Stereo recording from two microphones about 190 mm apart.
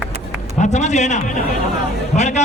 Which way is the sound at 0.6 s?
35° left (ahead or behind).